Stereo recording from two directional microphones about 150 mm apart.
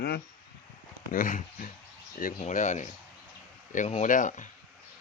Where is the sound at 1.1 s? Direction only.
65° left (ahead or behind).